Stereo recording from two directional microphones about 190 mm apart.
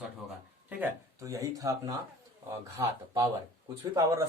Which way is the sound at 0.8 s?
15° right (ahead or behind).